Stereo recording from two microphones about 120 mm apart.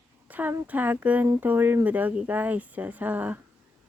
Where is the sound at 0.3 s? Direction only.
15° right (ahead or behind).